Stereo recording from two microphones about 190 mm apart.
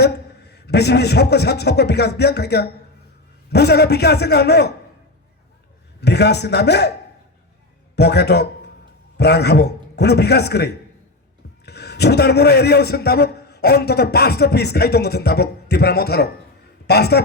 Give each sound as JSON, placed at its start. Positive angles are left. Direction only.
{"t": 0.0, "sound": "a man's voice", "side_deg": 60}
{"t": 6.0, "sound": "a man's voice", "side_deg": 60}
{"t": 7.9, "sound": "a man's voice", "side_deg": 60}